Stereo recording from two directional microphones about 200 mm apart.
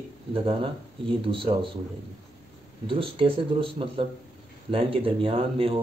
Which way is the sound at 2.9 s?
25° right (ahead or behind).